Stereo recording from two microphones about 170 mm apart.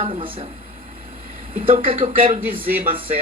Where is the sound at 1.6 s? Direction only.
35° right (ahead or behind).